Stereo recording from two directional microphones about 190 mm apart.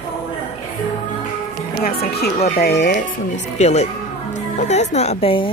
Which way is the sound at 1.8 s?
55° left (ahead or behind).